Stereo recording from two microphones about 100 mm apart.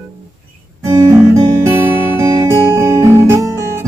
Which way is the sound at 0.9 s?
35° right (ahead or behind).